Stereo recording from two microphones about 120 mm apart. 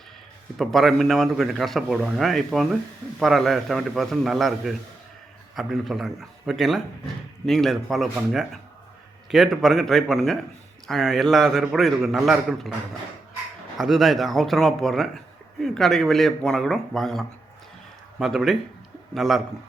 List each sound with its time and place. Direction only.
0.6 s speech: centre (ahead or behind)
13.7 s speech: centre (ahead or behind)